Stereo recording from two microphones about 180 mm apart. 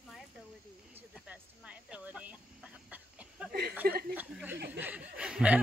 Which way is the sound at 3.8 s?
55° right (ahead or behind).